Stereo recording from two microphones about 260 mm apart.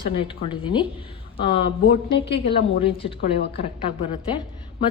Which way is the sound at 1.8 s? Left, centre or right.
Left.